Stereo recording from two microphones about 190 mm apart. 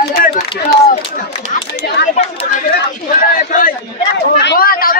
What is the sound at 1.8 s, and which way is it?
Chatter, 55° left (ahead or behind).